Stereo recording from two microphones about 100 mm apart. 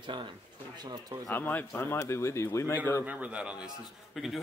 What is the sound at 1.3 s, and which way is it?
Speech, 20° left (ahead or behind).